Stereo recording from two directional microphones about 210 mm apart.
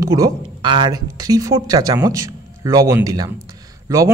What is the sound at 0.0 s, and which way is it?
A man's voice, 15° right (ahead or behind).